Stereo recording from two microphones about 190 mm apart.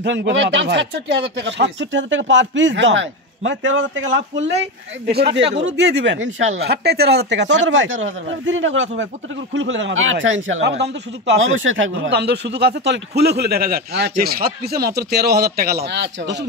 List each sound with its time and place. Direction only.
0.0 s speech: 70° right (ahead or behind)
5.0 s speech: 60° right (ahead or behind); by 6.5 s 80° right
6.6 s speech: 60° right (ahead or behind); by 8.8 s 90° right
8.9 s speech: 75° right (ahead or behind)